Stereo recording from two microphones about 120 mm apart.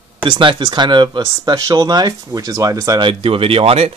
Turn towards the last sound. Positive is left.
turn(degrees=-55)  # may be behind; listen again after turning